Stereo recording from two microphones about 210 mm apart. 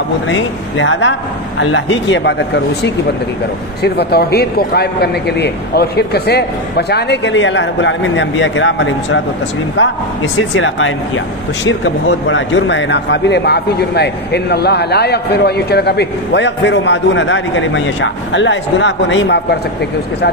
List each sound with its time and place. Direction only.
0.3 s a man's voice: 65° left (ahead or behind)